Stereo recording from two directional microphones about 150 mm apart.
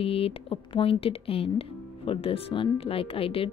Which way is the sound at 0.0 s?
40° left (ahead or behind).